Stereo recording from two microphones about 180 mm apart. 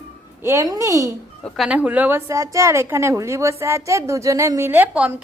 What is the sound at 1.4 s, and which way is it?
A woman's voice, centre (ahead or behind).